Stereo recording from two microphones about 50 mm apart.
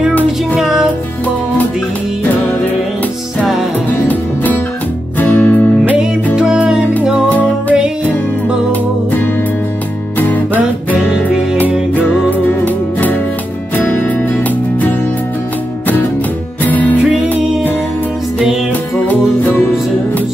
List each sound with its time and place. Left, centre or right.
0.1 s music: left
0.6 s music: centre
5.2 s music: left
6.3 s music: centre
7.2 s music: left
10.1 s music: left
11.9 s music: left
16.6 s music: left